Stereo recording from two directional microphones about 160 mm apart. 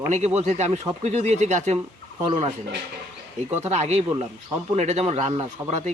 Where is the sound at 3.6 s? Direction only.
45° right (ahead or behind).